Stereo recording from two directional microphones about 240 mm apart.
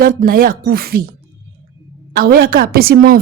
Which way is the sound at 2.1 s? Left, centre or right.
Right.